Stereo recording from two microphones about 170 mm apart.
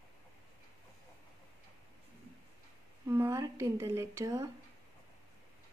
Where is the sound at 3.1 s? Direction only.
20° right (ahead or behind).